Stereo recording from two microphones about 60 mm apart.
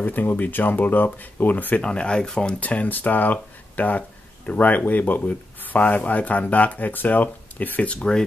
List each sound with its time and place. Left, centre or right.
0.0 s speech: left
1.8 s speech: centre